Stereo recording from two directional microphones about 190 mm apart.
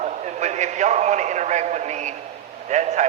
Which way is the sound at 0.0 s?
35° right (ahead or behind).